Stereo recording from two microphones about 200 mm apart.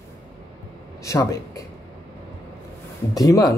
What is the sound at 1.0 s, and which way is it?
Speech, 15° left (ahead or behind).